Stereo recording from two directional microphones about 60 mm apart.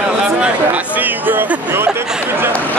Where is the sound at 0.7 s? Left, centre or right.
Right.